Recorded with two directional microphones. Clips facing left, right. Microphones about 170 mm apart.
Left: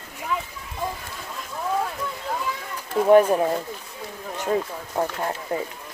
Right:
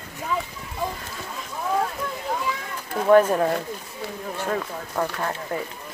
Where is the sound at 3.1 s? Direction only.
15° left (ahead or behind).